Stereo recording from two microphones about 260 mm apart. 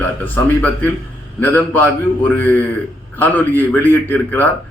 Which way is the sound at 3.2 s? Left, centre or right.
Centre.